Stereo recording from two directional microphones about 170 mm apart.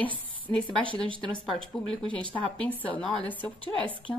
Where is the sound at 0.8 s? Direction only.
30° right (ahead or behind).